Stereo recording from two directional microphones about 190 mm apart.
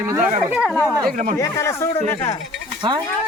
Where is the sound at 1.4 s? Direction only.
15° left (ahead or behind).